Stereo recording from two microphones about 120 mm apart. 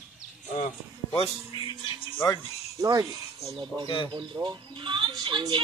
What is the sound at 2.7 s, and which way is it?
Speech, 30° right (ahead or behind).